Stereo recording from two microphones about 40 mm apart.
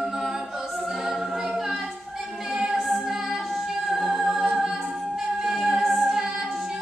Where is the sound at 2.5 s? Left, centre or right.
Centre.